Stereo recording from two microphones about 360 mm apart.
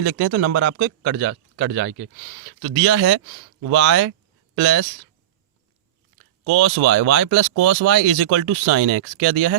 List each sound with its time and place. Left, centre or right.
0.0 s speech: right
6.4 s speech: right